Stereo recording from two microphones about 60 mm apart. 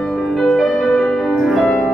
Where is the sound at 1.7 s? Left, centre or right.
Left.